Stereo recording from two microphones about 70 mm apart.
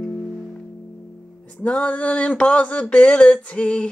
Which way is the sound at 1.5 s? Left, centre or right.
Centre.